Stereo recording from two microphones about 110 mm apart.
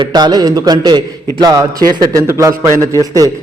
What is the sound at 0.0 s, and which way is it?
A man's voice, 35° right (ahead or behind).